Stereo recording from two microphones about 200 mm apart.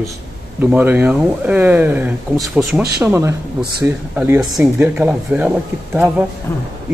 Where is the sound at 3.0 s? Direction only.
15° right (ahead or behind).